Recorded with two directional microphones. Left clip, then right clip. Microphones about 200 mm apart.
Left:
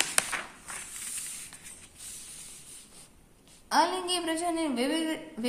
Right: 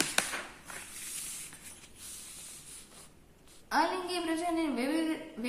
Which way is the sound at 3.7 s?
35° left (ahead or behind).